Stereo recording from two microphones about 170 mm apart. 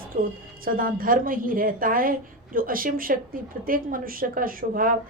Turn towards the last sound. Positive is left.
turn(degrees=-55)  # may be behind; listen again after turning